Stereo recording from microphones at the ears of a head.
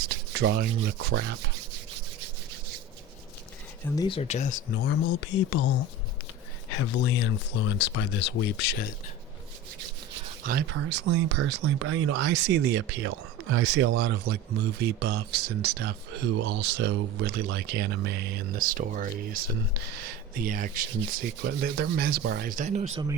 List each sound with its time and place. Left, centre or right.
0.0 s rub: right
4.1 s speech: left
9.8 s rub: right